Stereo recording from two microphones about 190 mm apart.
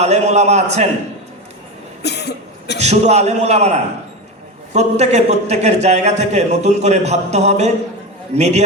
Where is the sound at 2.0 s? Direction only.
60° left (ahead or behind).